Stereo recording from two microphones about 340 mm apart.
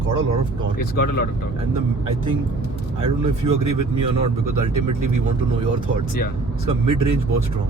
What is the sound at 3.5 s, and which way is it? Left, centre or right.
Speech, right.